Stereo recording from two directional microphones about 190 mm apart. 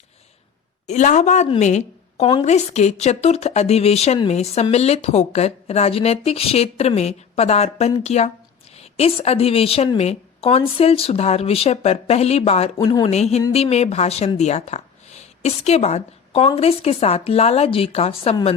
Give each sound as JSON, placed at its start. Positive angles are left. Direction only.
{"t": 0.9, "sound": "a woman's voice", "side_deg": 40}